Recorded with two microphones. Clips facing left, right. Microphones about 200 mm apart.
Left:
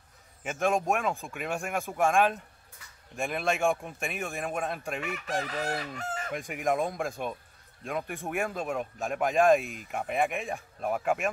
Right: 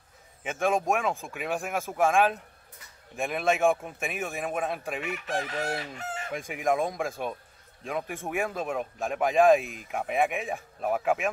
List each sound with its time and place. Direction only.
0.4 s a man's voice: centre (ahead or behind)
5.0 s chicken: 40° left (ahead or behind)
6.3 s a man's voice: centre (ahead or behind)